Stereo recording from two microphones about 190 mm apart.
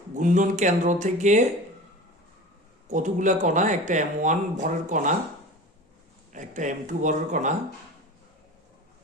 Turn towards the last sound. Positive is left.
turn(degrees=-40)  # may be behind; listen again after turning